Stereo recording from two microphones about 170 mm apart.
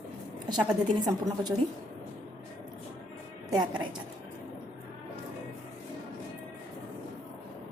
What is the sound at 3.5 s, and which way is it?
Speech, 25° right (ahead or behind).